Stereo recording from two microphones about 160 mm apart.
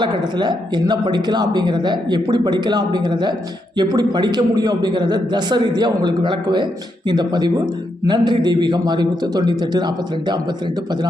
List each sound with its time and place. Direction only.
0.0 s speech: 25° right (ahead or behind)